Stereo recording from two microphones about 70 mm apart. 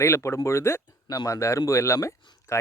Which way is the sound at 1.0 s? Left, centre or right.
Left.